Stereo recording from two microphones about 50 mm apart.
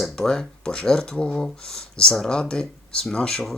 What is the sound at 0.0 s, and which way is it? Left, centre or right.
Speech, centre.